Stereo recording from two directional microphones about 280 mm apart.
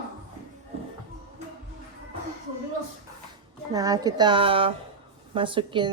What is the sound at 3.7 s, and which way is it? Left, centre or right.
A woman's voice, centre.